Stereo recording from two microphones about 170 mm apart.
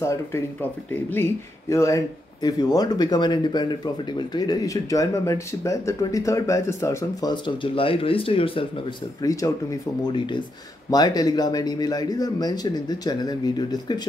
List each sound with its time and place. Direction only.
0.0 s speech: 15° left (ahead or behind); by 8.8 s 30° left (ahead or behind)
9.2 s speech: 20° left (ahead or behind)